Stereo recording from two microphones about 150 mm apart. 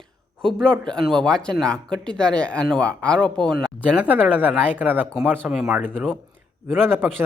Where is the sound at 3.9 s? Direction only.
10° right (ahead or behind); by 6.1 s 5° left (ahead or behind).